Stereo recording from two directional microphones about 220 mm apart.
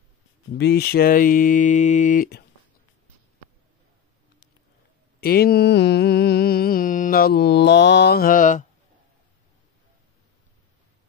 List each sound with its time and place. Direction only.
0.6 s speech: 45° left (ahead or behind)
5.2 s mantra: 45° left (ahead or behind)